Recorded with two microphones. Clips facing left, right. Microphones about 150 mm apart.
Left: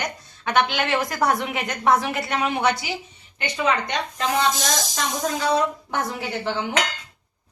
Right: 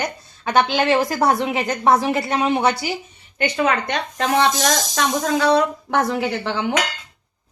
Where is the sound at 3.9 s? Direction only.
55° right (ahead or behind).